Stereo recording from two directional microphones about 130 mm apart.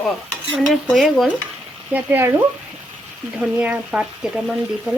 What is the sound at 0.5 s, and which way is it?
Speech, centre (ahead or behind).